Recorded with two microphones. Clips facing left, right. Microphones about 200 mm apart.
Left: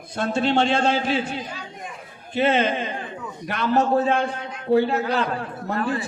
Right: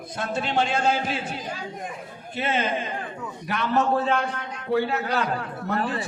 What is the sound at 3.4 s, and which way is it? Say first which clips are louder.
A man's voice: left 2 dB; 40° left (ahead or behind).